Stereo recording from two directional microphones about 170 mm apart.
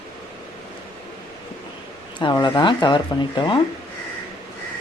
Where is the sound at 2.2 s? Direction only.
25° left (ahead or behind).